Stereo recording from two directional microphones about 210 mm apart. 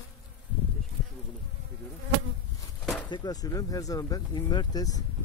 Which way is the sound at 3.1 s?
20° left (ahead or behind).